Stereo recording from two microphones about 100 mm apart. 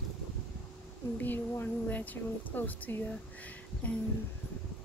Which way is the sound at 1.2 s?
20° left (ahead or behind).